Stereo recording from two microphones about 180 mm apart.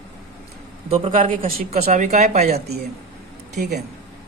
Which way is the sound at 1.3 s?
50° right (ahead or behind).